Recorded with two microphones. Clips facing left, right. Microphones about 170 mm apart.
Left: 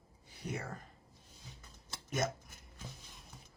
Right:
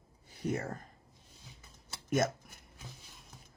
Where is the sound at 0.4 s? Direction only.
45° right (ahead or behind).